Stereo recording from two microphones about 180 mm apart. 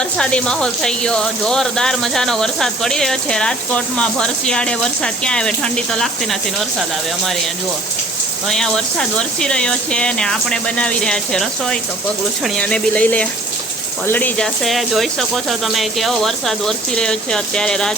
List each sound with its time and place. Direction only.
0.0 s speech: 5° left (ahead or behind)
8.4 s speech: 5° left (ahead or behind)